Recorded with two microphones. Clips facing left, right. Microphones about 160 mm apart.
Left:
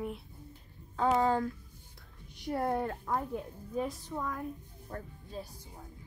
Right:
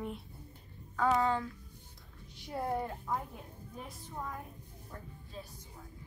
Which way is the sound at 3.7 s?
90° left.